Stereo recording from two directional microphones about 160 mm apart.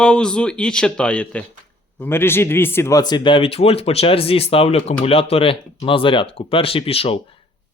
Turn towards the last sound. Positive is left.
turn(degrees=35)  # may be behind; listen again after turning